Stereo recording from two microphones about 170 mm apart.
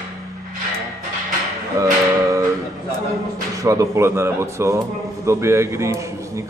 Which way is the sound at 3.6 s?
20° right (ahead or behind).